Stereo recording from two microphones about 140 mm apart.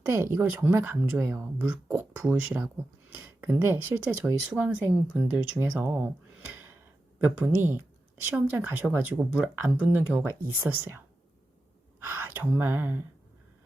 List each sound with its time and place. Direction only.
0.0 s speech: 15° right (ahead or behind)